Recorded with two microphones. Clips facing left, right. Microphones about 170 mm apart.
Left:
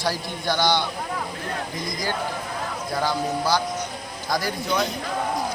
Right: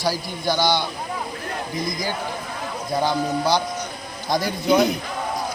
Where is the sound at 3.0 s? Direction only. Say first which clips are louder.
Right 3 dB; 20° right (ahead or behind).